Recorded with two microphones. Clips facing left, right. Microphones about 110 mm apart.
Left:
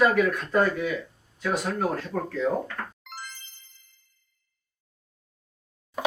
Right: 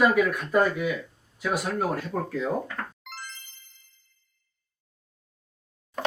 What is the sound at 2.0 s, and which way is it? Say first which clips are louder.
Speech: left 1 dB; 10° right (ahead or behind).